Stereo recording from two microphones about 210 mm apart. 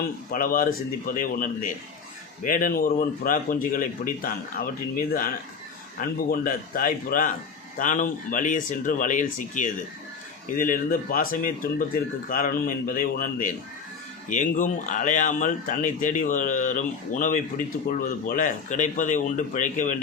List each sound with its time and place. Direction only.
0.3 s speech: 40° left (ahead or behind)